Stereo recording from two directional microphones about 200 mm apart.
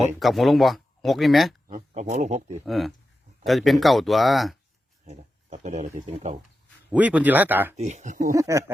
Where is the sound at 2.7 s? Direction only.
Centre (ahead or behind).